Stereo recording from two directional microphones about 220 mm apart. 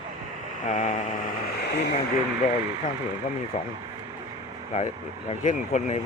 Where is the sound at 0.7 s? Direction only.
35° left (ahead or behind).